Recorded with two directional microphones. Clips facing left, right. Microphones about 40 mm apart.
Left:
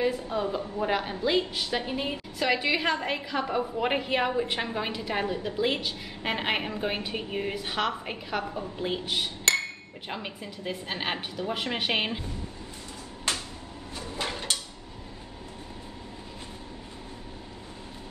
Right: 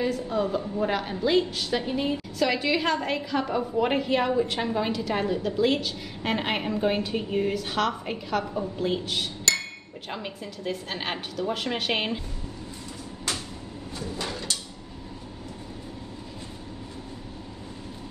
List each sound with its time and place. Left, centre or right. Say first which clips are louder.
0.1 s a woman's voice: right 3 dB; centre
0.6 s a woman's voice: right 1 dB; centre
13.9 s a sound: even; left